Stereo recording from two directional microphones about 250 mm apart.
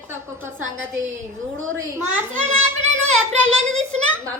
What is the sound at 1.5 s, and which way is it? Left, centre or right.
Speech, right.